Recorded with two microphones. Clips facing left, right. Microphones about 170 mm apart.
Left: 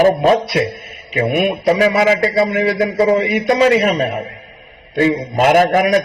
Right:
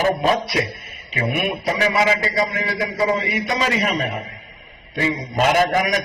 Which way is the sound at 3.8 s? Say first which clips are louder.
Left 7 dB; 35° left (ahead or behind).